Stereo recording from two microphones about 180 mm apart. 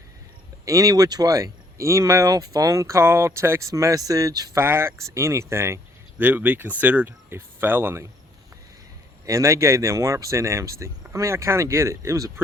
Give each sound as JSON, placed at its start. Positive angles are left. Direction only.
{"t": 0.6, "sound": "speech", "side_deg": -20}
{"t": 9.2, "sound": "speech", "side_deg": -15}